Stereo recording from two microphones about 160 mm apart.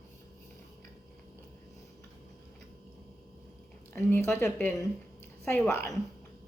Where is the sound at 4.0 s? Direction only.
15° left (ahead or behind).